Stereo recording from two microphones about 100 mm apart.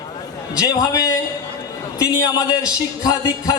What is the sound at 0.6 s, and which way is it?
A man's voice, 35° left (ahead or behind).